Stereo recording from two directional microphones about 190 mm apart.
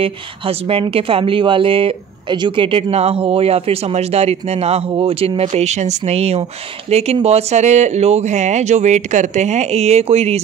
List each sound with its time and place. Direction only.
0.0 s speech: 30° right (ahead or behind)